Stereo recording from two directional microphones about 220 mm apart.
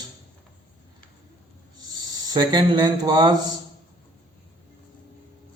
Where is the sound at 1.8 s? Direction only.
15° right (ahead or behind).